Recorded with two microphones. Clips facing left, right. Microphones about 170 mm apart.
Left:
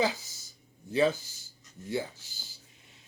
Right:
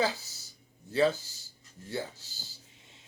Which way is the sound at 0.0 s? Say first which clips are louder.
Left 1 dB; 15° left (ahead or behind).